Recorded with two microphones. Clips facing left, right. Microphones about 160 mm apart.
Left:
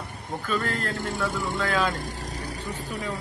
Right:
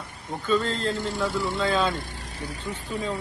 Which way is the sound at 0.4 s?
20° right (ahead or behind).